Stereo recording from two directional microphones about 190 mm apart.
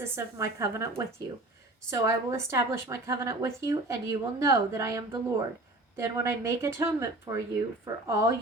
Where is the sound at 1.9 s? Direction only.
15° right (ahead or behind).